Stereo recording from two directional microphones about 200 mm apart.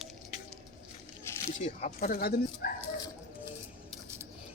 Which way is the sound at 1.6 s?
35° left (ahead or behind).